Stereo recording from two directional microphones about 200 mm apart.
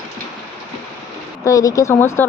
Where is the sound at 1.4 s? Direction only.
15° left (ahead or behind).